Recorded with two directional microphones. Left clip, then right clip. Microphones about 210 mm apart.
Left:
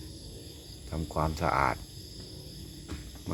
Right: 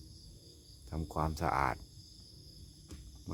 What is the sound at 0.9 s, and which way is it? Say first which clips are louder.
Speech: left 5 dB; 20° right (ahead or behind).